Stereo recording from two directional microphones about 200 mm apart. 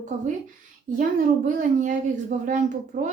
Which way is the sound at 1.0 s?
40° right (ahead or behind).